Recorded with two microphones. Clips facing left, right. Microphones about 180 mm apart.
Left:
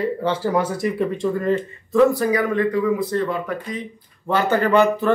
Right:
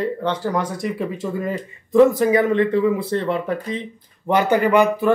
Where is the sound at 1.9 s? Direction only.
20° right (ahead or behind).